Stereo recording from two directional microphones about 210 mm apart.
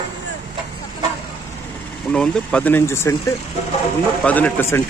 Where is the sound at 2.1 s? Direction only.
5° left (ahead or behind).